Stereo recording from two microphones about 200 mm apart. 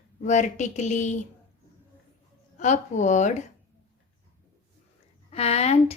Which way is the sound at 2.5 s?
35° left (ahead or behind).